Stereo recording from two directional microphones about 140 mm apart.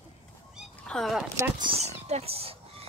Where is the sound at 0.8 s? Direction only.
Centre (ahead or behind).